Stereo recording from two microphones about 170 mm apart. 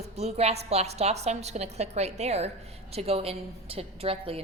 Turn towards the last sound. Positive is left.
turn(degrees=-35)  # may be behind; listen again after turning